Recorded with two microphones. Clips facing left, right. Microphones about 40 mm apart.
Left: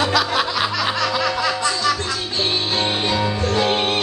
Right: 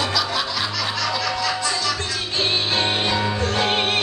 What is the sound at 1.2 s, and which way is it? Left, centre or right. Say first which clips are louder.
Music: left 3 dB; left.